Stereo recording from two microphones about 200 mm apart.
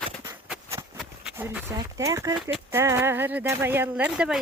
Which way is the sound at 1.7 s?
15° right (ahead or behind).